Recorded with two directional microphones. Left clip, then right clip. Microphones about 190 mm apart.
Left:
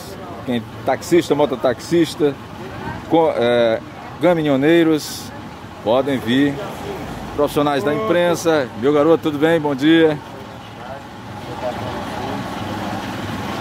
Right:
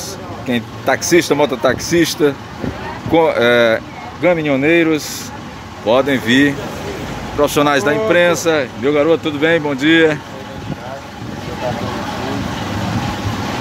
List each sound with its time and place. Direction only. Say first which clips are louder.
0.5 s speech: right 4 dB; 10° left (ahead or behind)
4.2 s speech: right 1 dB; 25° left (ahead or behind)
5.9 s speech: right 4 dB; 5° left (ahead or behind)